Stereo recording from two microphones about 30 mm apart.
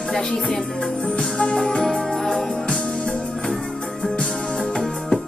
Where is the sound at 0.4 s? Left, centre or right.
Centre.